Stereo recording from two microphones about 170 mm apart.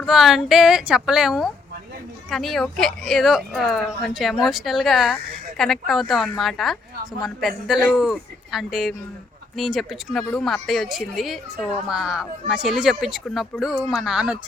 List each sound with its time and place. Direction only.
0.0 s a woman's voice: centre (ahead or behind)